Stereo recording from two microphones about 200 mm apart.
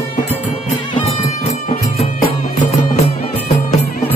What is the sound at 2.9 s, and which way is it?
Music, 30° left (ahead or behind).